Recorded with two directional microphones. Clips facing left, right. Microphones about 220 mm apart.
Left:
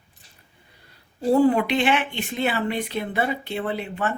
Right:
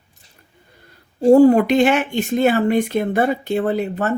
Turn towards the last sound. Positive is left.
turn(degrees=-40)  # may be behind; listen again after turning